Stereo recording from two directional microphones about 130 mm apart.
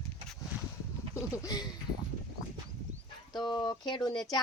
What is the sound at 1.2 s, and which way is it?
Speech, 30° left (ahead or behind).